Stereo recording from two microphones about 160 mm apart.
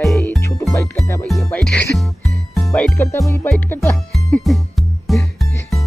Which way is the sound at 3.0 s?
15° left (ahead or behind).